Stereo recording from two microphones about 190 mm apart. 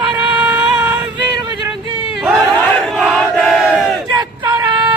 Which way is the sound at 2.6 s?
Centre (ahead or behind).